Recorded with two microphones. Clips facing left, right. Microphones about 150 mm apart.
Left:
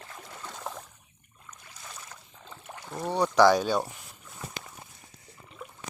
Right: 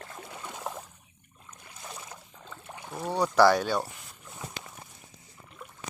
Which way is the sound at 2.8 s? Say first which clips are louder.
Left 1 dB; 5° right (ahead or behind).